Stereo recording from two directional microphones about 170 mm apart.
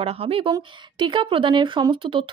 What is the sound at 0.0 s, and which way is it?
Speech, 35° right (ahead or behind).